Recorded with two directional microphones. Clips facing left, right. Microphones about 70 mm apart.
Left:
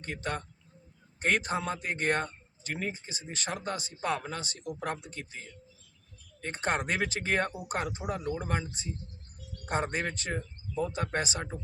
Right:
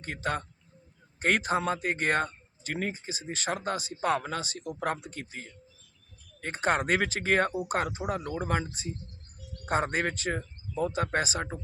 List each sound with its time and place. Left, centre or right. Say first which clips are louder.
0.1 s speech: right 3 dB; right
6.4 s speech: right 4 dB; right